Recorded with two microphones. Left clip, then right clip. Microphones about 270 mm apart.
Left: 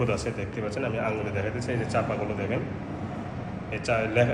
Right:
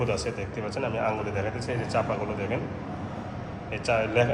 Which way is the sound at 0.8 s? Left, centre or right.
Centre.